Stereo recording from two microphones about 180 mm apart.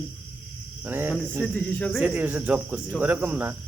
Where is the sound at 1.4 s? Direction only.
10° left (ahead or behind).